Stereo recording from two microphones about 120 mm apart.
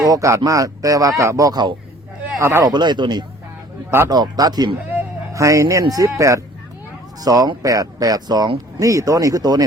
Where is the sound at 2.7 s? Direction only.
40° right (ahead or behind).